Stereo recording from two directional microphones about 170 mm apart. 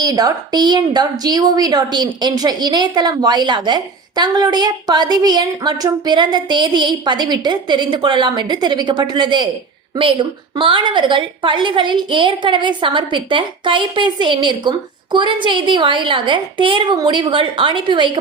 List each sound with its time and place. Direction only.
0.0 s a woman's voice: 20° right (ahead or behind)